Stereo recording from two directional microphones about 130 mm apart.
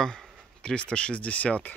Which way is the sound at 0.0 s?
5° left (ahead or behind).